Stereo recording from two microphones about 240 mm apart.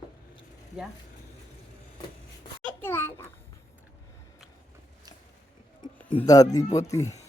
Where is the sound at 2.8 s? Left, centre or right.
Centre.